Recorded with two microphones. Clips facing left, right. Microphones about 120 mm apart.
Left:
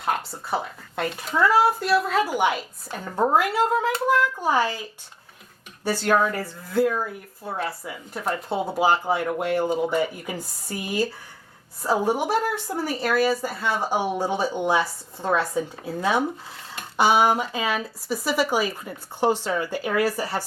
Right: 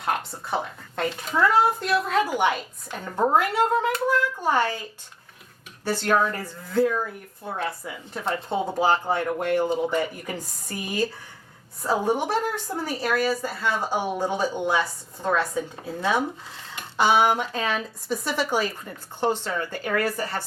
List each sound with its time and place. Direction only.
0.0 s speech: 5° left (ahead or behind)
5.8 s speech: 5° left (ahead or behind)
14.8 s speech: 5° left (ahead or behind)